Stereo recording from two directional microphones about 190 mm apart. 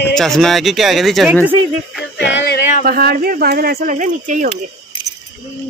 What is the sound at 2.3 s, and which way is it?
Music, 65° left (ahead or behind).